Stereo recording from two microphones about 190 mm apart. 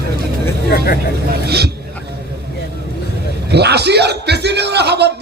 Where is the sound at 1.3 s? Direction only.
60° right (ahead or behind).